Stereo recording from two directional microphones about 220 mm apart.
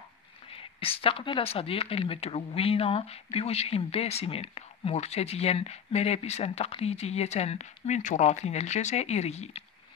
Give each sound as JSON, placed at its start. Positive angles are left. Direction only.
{"t": 0.5, "sound": "speech", "side_deg": 25}